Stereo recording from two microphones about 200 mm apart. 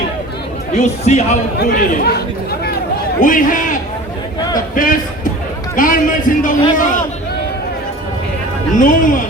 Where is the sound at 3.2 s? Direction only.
40° left (ahead or behind).